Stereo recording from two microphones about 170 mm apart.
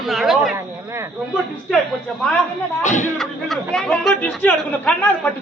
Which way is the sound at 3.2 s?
Centre (ahead or behind).